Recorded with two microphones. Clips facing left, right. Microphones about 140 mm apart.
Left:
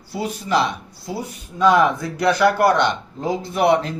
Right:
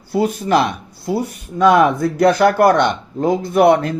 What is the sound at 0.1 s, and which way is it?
Speech, 55° right (ahead or behind).